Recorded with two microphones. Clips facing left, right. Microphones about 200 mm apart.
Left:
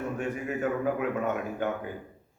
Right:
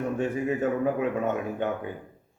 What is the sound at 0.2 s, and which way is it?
A man's voice, 25° right (ahead or behind).